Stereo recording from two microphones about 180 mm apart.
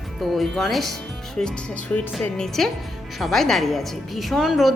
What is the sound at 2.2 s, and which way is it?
Speech, 5° left (ahead or behind).